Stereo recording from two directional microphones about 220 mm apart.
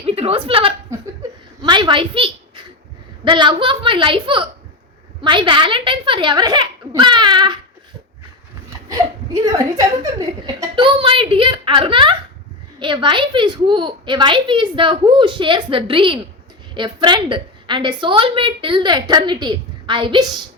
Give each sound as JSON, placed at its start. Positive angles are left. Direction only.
{"t": 0.0, "sound": "a woman's voice", "side_deg": -25}
{"t": 8.9, "sound": "a woman's voice", "side_deg": -15}